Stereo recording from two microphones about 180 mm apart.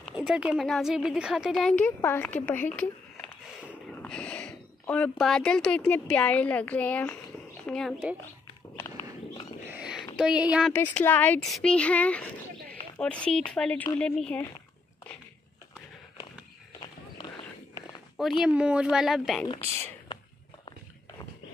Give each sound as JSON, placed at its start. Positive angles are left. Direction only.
{"t": 0.0, "sound": "a woman's voice", "side_deg": -5}
{"t": 8.7, "sound": "walk", "side_deg": 15}
{"t": 9.7, "sound": "a sound", "side_deg": -5}
{"t": 10.1, "sound": "a woman's voice", "side_deg": -5}
{"t": 10.7, "sound": "a woman's voice", "side_deg": 10}
{"t": 17.2, "sound": "walk", "side_deg": 25}
{"t": 18.4, "sound": "a woman's voice", "side_deg": -5}
{"t": 20.1, "sound": "a sound", "side_deg": 30}